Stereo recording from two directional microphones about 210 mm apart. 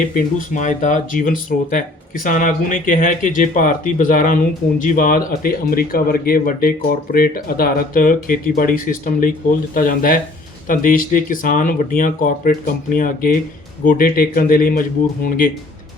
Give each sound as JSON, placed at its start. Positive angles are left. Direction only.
{"t": 0.3, "sound": "speech", "side_deg": 35}